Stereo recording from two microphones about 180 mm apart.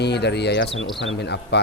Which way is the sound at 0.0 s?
70° left (ahead or behind).